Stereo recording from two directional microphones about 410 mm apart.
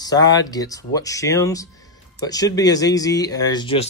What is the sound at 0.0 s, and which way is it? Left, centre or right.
Speech, centre.